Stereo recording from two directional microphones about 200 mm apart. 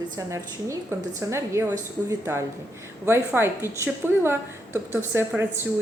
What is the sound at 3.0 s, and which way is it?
A woman's voice, 10° right (ahead or behind).